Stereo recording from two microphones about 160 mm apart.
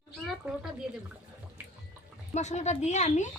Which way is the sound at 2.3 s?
45° left (ahead or behind).